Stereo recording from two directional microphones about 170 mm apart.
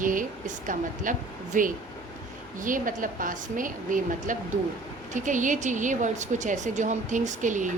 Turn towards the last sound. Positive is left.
turn(degrees=-45)  # may be behind; listen again after turning